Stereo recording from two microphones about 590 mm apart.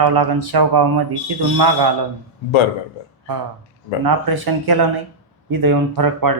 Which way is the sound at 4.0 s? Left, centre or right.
Right.